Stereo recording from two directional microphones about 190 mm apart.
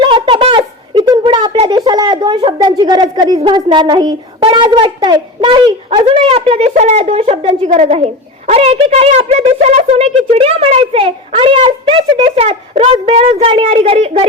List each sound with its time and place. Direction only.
0.0 s a woman's voice: 25° right (ahead or behind)